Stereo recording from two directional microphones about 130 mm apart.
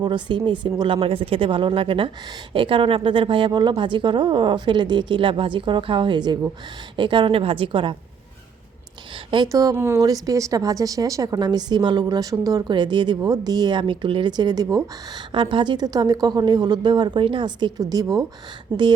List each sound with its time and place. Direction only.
0.0 s speech: 35° right (ahead or behind)
9.3 s a woman's voice: 30° right (ahead or behind)
15.3 s speech: 40° right (ahead or behind)